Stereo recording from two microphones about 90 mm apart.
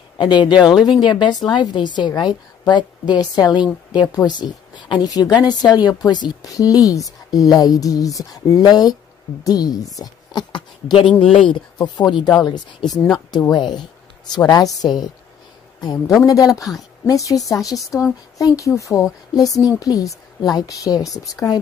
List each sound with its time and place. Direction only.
0.2 s a woman's voice: 55° left (ahead or behind)
5.1 s speech: 45° left (ahead or behind)
9.9 s a woman's voice: 55° left (ahead or behind)
14.4 s speech: 45° left (ahead or behind)
16.3 s a woman's voice: 40° left (ahead or behind)